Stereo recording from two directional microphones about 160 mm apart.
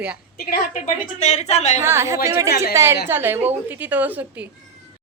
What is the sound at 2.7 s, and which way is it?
A woman's voice, 15° right (ahead or behind).